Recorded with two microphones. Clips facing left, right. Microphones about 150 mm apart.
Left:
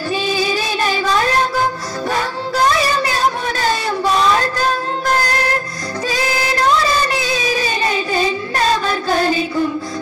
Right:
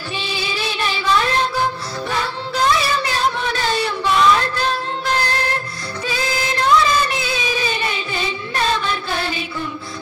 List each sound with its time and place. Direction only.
0.3 s music: 45° left (ahead or behind)